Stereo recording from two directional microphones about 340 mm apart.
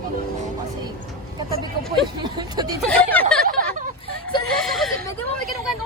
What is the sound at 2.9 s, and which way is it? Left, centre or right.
Speech, centre.